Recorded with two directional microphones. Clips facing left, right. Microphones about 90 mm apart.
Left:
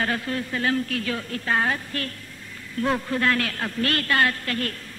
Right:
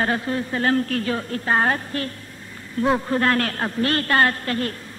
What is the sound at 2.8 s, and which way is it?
A man's voice, 25° right (ahead or behind).